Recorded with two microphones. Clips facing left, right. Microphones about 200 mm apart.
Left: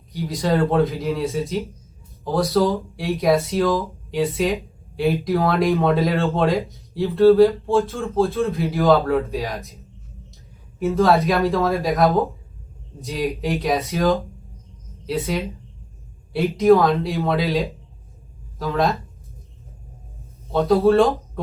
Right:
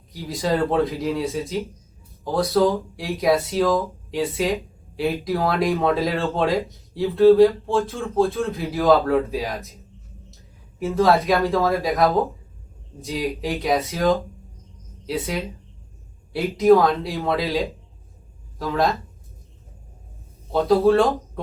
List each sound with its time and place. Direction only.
0.1 s speech: centre (ahead or behind)
10.8 s speech: centre (ahead or behind)
20.5 s speech: centre (ahead or behind)